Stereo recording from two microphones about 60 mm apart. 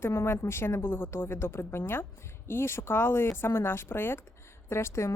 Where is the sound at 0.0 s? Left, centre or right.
Left.